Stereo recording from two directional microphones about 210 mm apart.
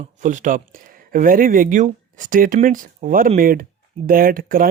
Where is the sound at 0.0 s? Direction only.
35° right (ahead or behind).